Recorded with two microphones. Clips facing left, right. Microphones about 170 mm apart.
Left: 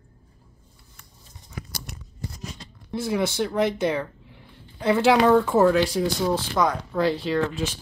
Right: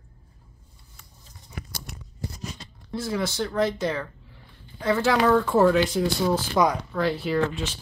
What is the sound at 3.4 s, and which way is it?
Speech, 10° left (ahead or behind).